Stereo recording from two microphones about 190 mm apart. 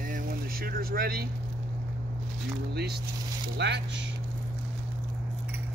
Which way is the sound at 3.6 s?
65° right (ahead or behind).